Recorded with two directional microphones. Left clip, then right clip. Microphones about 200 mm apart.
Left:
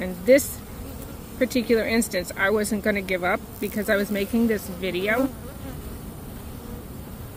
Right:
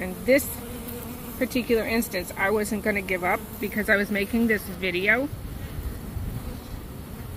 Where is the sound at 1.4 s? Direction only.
90° left.